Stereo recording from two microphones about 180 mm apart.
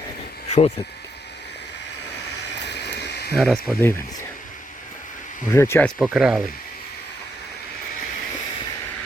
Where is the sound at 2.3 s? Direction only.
70° left (ahead or behind).